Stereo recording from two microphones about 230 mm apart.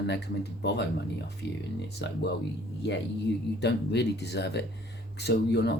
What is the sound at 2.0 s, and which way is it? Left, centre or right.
Speech, left.